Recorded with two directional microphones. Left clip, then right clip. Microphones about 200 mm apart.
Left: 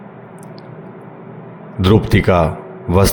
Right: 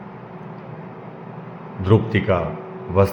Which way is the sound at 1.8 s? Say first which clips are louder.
Left 5 dB; 50° left (ahead or behind).